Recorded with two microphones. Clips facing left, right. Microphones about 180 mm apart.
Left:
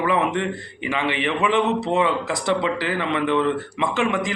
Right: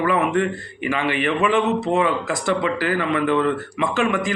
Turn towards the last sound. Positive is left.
turn(degrees=20)  # may be behind; listen again after turning